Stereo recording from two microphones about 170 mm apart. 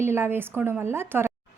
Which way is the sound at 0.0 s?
15° right (ahead or behind).